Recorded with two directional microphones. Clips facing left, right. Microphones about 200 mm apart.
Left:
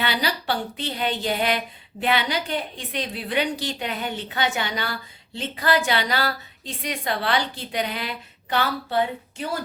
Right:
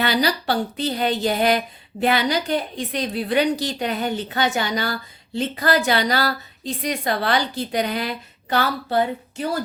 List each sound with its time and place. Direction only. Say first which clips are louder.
0.0 s speech: right 5 dB; 40° right (ahead or behind)